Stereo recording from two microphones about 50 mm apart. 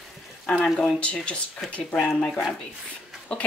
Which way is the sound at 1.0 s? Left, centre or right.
Left.